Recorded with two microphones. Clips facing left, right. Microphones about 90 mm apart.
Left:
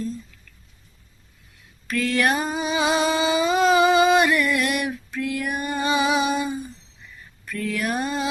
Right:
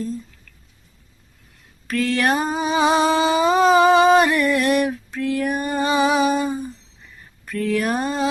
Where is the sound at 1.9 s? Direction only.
30° right (ahead or behind).